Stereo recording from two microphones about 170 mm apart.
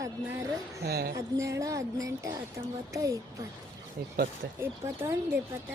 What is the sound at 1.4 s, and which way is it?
Speech, 20° right (ahead or behind).